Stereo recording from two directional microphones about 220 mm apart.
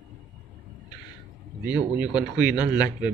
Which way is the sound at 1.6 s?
5° right (ahead or behind).